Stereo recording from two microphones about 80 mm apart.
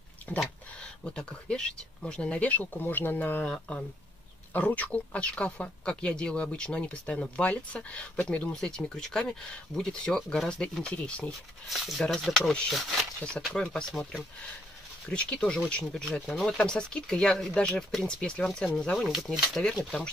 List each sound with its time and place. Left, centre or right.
0.4 s speech: centre
11.7 s speech: centre
15.0 s speech: centre
16.5 s speech: centre
19.0 s speech: centre
19.6 s speech: centre